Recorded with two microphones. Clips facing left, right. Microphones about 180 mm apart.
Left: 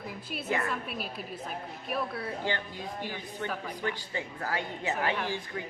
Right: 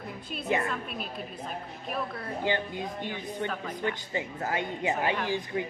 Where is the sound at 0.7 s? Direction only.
5° left (ahead or behind).